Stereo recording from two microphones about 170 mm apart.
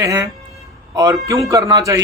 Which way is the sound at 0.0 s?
20° right (ahead or behind).